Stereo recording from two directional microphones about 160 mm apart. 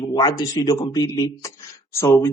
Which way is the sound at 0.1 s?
25° left (ahead or behind).